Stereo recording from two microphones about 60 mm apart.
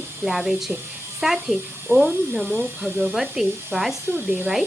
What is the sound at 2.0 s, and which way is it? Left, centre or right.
Speech, right.